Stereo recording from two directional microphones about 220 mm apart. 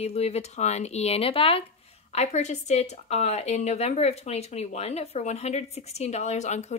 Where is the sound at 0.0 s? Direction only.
25° left (ahead or behind).